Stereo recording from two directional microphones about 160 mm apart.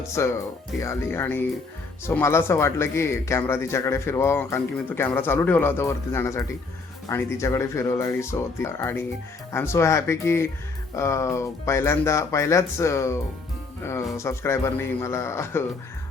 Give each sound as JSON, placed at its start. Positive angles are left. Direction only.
{"t": 0.2, "sound": "speech", "side_deg": 15}
{"t": 14.2, "sound": "speech", "side_deg": 15}